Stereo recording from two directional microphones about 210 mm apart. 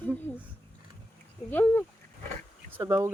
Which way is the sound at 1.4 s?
10° left (ahead or behind).